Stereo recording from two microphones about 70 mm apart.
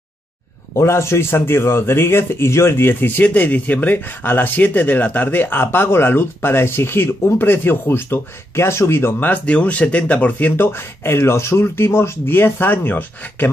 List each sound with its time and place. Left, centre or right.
0.7 s speech: left
9.3 s speech: centre